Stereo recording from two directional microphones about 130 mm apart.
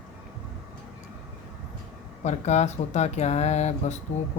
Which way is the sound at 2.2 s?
60° left (ahead or behind).